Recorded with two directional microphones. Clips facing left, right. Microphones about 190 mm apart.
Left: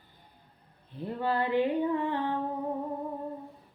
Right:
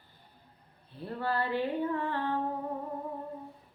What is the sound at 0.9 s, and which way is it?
Female singing, 15° left (ahead or behind).